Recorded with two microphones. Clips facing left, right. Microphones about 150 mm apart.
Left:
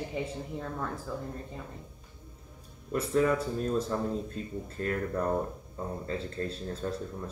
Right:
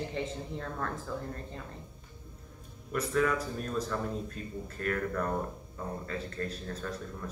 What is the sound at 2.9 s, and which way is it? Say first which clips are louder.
A man's voice: left 3 dB; 25° left (ahead or behind).